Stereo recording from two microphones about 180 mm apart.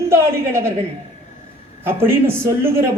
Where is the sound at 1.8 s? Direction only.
10° right (ahead or behind).